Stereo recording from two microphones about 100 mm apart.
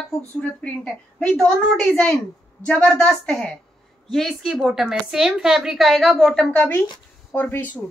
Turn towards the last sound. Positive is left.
turn(degrees=15)  # may be behind; listen again after turning